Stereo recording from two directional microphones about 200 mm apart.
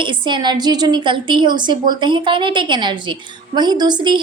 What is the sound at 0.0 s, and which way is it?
A woman's voice, 25° right (ahead or behind).